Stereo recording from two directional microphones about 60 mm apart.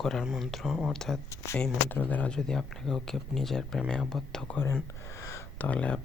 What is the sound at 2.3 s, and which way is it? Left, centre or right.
Speech, centre.